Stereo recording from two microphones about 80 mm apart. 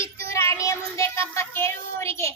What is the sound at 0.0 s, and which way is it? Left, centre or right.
Child singing, left.